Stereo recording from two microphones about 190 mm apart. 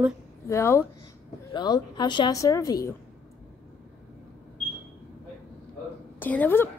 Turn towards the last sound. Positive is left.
turn(degrees=10)  # may be behind; listen again after turning